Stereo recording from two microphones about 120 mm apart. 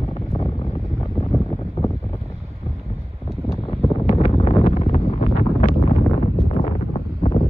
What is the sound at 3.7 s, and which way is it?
Wind noise, 50° left (ahead or behind).